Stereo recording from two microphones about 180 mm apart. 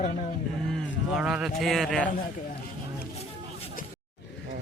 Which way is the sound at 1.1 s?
5° right (ahead or behind).